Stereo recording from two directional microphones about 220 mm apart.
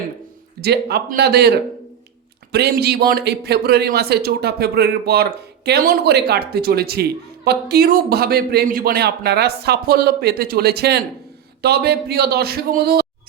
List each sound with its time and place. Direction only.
0.6 s a man's voice: 45° right (ahead or behind)